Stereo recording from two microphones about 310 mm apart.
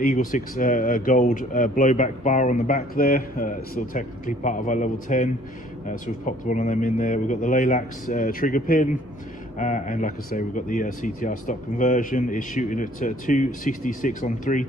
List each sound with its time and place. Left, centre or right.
0.0 s speech: left